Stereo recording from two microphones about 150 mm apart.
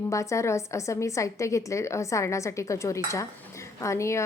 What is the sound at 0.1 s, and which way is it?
A woman's voice, 20° left (ahead or behind).